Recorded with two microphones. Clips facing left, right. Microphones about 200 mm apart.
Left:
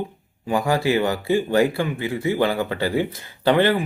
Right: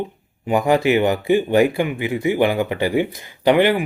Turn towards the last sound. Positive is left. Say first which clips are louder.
# right 3 dB
turn(degrees=-15)  # may be behind; listen again after turning